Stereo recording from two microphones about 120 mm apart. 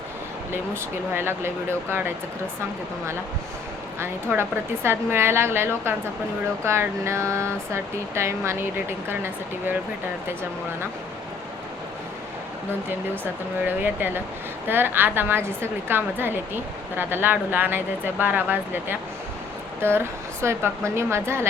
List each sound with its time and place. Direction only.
1.1 s speech: 20° right (ahead or behind)
4.0 s speech: 20° right (ahead or behind)
13.7 s speech: 15° right (ahead or behind)